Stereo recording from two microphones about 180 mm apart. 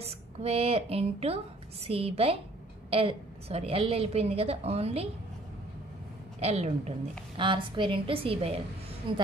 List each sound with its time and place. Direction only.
0.0 s a woman's voice: 35° right (ahead or behind)
6.4 s a woman's voice: 35° right (ahead or behind)